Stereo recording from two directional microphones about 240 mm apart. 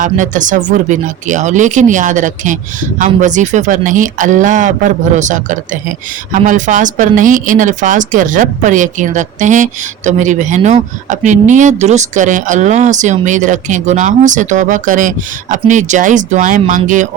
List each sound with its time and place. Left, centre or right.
0.0 s speech: right